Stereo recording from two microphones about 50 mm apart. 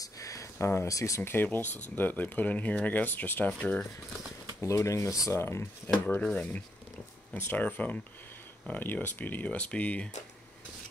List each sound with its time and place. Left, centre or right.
0.3 s speech: left
1.2 s speech: left
4.6 s speech: left
5.3 s speech: left
6.2 s speech: left
7.3 s speech: left
7.6 s speech: left